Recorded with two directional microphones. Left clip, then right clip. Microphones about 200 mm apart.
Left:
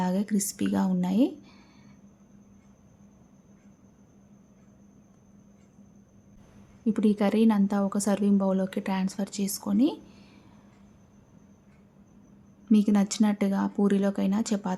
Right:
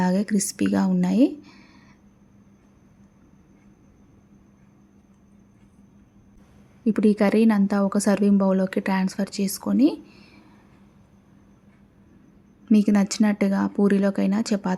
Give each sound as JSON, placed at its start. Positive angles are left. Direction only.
{"t": 0.0, "sound": "speech", "side_deg": -20}
{"t": 6.8, "sound": "a woman's voice", "side_deg": -15}
{"t": 12.6, "sound": "a woman's voice", "side_deg": -15}